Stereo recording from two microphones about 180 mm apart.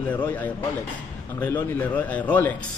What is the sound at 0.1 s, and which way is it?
A man's voice, 10° left (ahead or behind).